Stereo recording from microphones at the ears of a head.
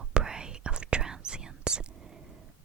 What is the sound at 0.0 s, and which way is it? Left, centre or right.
Whispering, right.